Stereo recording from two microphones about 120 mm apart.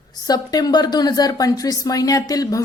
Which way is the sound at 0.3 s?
35° left (ahead or behind).